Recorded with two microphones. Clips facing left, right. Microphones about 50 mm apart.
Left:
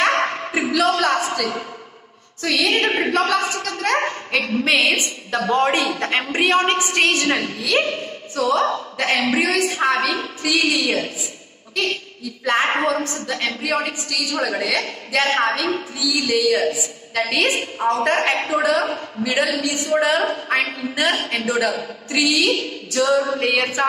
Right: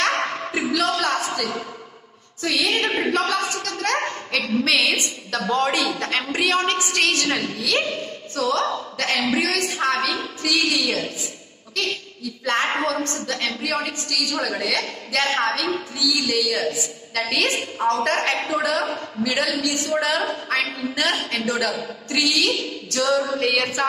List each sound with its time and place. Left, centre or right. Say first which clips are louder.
0.2 s a sound: left 3 dB; centre
2.4 s a woman's voice: left 3 dB; centre
2.7 s a woman's voice: left 3 dB; left
3.1 s a woman's voice: left 3 dB; centre
7.8 s a woman's voice: left 3 dB; left
8.4 s a woman's voice: left 3 dB; centre